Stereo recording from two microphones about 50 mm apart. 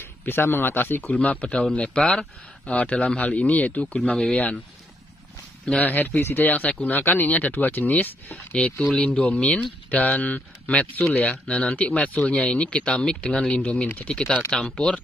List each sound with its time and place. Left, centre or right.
0.0 s a man's voice: left
1.5 s speech: centre
5.8 s speech: left
8.9 s speech: centre
9.9 s speech: left